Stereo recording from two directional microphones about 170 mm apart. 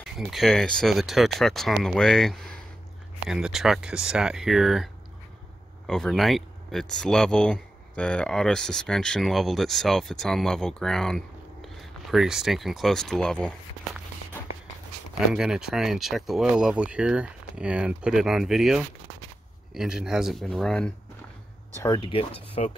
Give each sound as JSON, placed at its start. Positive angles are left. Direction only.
{"t": 0.1, "sound": "speech", "side_deg": 0}
{"t": 5.9, "sound": "speech", "side_deg": 0}
{"t": 15.1, "sound": "speech", "side_deg": -5}
{"t": 21.7, "sound": "speech", "side_deg": 25}